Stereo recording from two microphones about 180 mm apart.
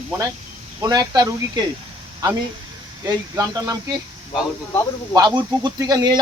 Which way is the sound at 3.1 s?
20° right (ahead or behind).